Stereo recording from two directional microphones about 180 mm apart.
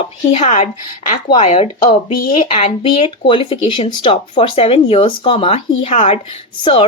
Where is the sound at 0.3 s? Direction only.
35° left (ahead or behind).